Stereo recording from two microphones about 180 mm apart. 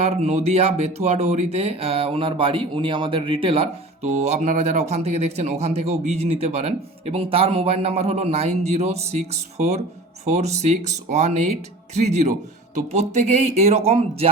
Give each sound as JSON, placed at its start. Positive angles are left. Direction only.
{"t": 0.0, "sound": "speech", "side_deg": -35}